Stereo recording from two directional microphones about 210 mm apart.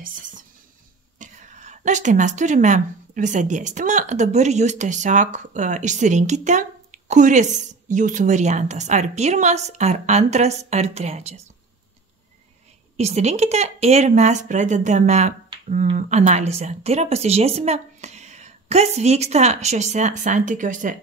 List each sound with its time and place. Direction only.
0.0 s a woman's voice: 40° right (ahead or behind)
12.9 s a woman's voice: 30° right (ahead or behind)